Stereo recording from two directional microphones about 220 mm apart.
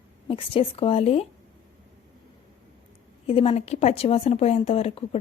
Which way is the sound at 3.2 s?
25° left (ahead or behind).